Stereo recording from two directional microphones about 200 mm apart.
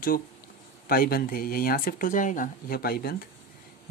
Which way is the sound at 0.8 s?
50° left (ahead or behind).